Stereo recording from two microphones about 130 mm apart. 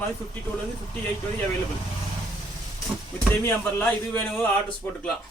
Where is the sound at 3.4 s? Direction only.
15° left (ahead or behind).